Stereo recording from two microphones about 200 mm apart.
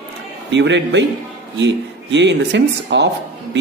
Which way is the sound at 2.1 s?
60° right (ahead or behind).